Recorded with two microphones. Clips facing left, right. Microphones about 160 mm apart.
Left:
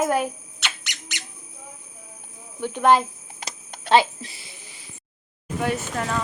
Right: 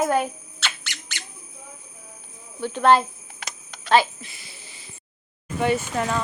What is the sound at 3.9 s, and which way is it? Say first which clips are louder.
Speech: left 1 dB; 30° left (ahead or behind).